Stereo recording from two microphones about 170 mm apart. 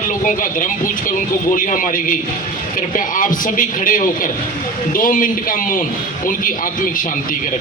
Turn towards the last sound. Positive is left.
turn(degrees=55)  # may be behind; listen again after turning